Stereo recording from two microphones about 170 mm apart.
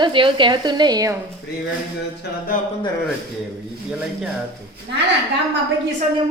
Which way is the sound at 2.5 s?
55° left (ahead or behind).